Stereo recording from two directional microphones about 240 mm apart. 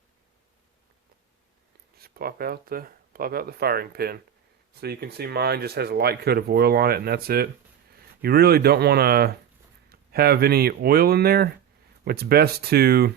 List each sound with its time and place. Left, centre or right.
2.0 s speech: right